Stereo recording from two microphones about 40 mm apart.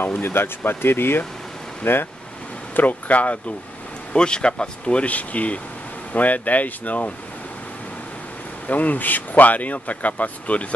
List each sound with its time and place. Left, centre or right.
0.2 s speech: left
2.7 s speech: left
4.1 s speech: left
8.6 s speech: left